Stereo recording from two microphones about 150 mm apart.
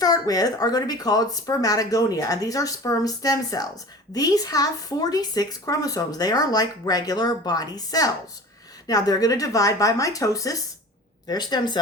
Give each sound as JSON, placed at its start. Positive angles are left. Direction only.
{"t": 0.0, "sound": "speech", "side_deg": 25}